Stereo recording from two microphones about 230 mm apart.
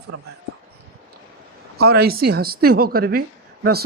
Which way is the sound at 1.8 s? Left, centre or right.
Right.